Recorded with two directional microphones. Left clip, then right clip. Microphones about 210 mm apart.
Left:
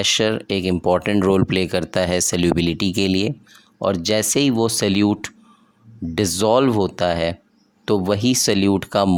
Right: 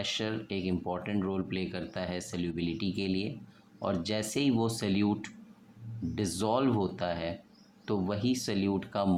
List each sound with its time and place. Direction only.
0.0 s speech: 55° left (ahead or behind)